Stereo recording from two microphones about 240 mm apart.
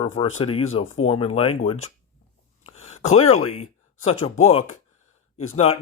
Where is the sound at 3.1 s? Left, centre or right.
Left.